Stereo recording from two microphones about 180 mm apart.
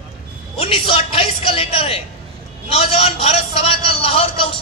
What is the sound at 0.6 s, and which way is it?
A man's voice, 30° left (ahead or behind).